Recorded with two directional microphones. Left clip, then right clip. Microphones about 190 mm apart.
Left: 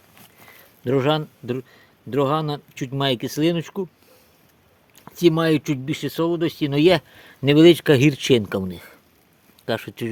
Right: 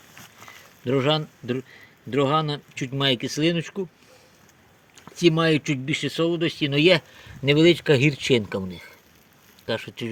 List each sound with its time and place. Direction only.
0.9 s speech: 50° left (ahead or behind)
5.2 s speech: 55° left (ahead or behind)